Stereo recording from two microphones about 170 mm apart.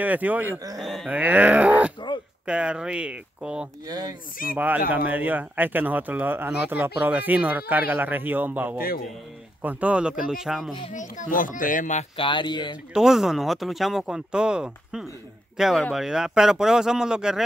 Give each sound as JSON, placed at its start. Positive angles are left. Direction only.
{"t": 0.0, "sound": "speech", "side_deg": -10}
{"t": 0.7, "sound": "speech", "side_deg": 0}
{"t": 3.8, "sound": "speech", "side_deg": -25}
{"t": 4.6, "sound": "speech", "side_deg": -10}
{"t": 8.7, "sound": "a man's voice", "side_deg": 60}
{"t": 9.6, "sound": "speech", "side_deg": -10}
{"t": 10.9, "sound": "a child's voice", "side_deg": 45}
{"t": 12.2, "sound": "speech", "side_deg": 30}
{"t": 12.9, "sound": "speech", "side_deg": -5}